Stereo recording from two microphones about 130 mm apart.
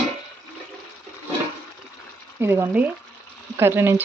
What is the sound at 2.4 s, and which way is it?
Speech, 20° right (ahead or behind).